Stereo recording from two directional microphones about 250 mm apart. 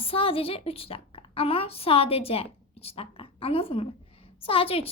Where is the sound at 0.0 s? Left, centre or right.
Left.